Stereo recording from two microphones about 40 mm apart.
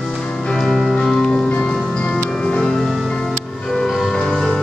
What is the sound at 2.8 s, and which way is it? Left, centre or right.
Music, centre.